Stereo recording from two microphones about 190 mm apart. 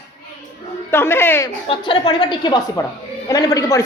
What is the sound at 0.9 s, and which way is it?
Speech, 10° left (ahead or behind).